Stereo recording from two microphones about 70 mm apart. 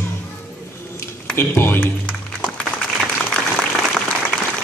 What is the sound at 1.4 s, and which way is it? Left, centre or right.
Speech, left.